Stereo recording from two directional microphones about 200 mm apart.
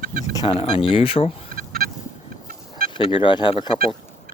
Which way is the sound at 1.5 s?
50° right (ahead or behind).